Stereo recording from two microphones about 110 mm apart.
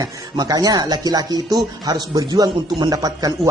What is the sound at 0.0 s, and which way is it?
Speech, 35° right (ahead or behind).